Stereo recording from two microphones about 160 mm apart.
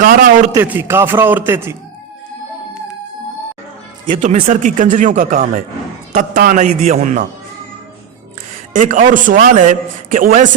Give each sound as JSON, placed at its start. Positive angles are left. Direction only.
{"t": 0.0, "sound": "speech", "side_deg": -55}
{"t": 0.5, "sound": "a man's voice", "side_deg": -15}
{"t": 4.1, "sound": "speech", "side_deg": -50}
{"t": 8.7, "sound": "a man's voice", "side_deg": -55}